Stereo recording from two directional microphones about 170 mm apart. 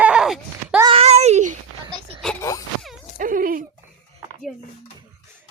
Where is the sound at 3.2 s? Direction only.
55° right (ahead or behind).